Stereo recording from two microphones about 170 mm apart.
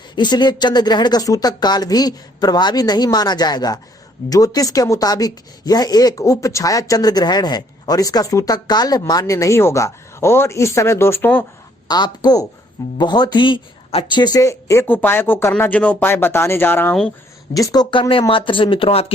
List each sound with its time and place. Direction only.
0.2 s speech: 25° left (ahead or behind)
11.9 s speech: 25° left (ahead or behind)
17.5 s speech: 20° left (ahead or behind)